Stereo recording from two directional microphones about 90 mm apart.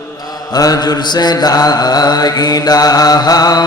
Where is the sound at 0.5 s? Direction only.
45° left (ahead or behind).